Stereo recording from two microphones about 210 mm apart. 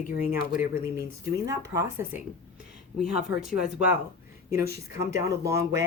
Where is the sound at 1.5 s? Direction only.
15° right (ahead or behind).